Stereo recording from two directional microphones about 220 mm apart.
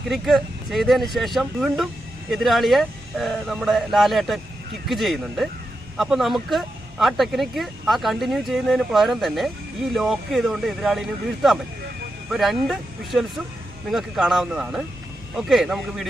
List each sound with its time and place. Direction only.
0.1 s speech: centre (ahead or behind)